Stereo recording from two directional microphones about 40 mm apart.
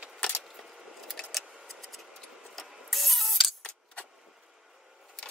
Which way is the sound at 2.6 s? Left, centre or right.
Centre.